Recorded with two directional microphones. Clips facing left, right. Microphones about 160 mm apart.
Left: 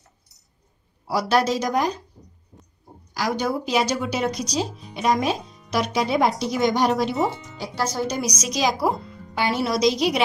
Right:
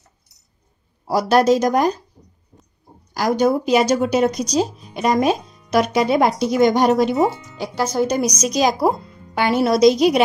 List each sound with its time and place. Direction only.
1.0 s speech: 45° right (ahead or behind)
3.2 s speech: 45° right (ahead or behind)